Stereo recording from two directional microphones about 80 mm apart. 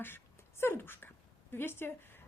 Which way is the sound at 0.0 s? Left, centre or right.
Left.